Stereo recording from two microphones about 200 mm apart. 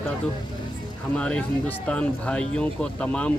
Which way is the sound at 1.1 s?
5° left (ahead or behind).